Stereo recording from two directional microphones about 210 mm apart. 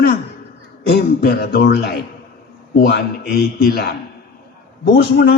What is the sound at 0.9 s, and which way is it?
A man's voice, 50° left (ahead or behind).